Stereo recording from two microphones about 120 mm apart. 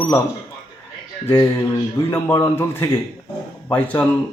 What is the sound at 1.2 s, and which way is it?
A man's voice, 20° left (ahead or behind).